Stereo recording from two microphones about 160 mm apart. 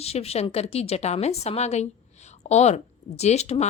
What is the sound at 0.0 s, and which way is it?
A woman's voice, 40° left (ahead or behind).